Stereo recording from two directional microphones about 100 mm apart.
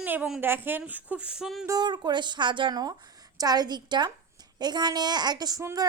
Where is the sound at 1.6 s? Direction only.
45° right (ahead or behind).